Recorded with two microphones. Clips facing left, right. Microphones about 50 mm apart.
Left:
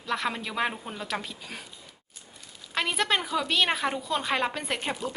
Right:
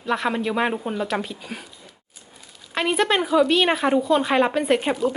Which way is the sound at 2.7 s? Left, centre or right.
Centre.